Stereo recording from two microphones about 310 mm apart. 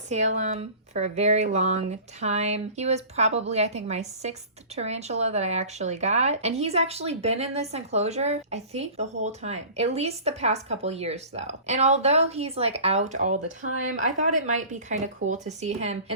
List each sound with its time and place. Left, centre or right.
0.1 s speech: right
13.7 s speech: right
13.9 s speech: right